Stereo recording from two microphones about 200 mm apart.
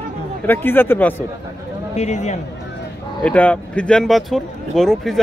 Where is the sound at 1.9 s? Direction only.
35° left (ahead or behind).